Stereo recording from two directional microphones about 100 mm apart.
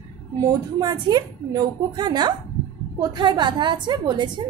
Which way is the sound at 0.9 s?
45° right (ahead or behind).